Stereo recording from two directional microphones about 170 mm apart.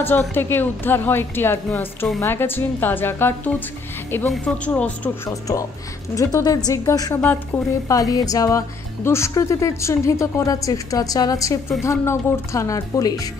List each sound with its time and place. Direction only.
0.0 s a woman's voice: 10° left (ahead or behind)
5.3 s speech: 20° left (ahead or behind)